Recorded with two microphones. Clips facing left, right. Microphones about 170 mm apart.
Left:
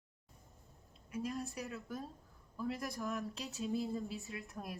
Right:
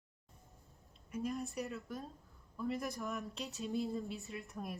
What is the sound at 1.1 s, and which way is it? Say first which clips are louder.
Speech: right 1 dB; centre (ahead or behind).